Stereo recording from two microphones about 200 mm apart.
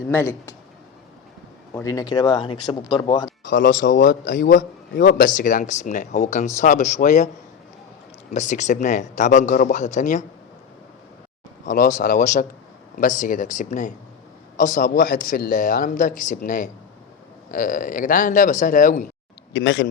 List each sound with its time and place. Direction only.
0.1 s speech: 10° left (ahead or behind)
1.7 s speech: 15° left (ahead or behind)
3.4 s a man's voice: 45° left (ahead or behind)
8.3 s a man's voice: 35° left (ahead or behind)
11.6 s a man's voice: 40° left (ahead or behind)
19.5 s speech: 65° left (ahead or behind)